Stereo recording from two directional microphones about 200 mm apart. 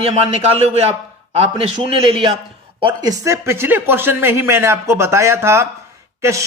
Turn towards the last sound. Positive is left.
turn(degrees=-15)  # may be behind; listen again after turning